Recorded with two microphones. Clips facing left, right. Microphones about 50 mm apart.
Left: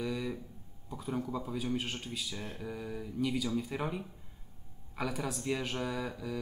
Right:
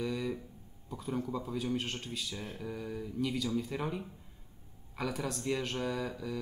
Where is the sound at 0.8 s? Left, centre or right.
Centre.